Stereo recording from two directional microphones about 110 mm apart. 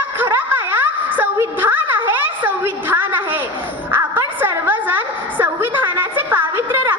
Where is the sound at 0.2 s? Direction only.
20° right (ahead or behind).